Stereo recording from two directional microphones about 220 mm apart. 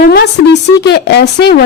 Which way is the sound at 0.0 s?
45° left (ahead or behind).